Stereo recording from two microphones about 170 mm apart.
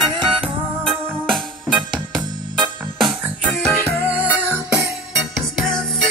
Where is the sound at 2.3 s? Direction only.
25° right (ahead or behind).